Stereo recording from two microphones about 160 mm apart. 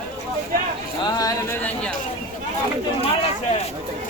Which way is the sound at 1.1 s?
20° left (ahead or behind).